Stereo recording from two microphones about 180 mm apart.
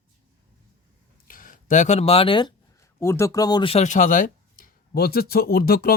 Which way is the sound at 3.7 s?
45° left (ahead or behind).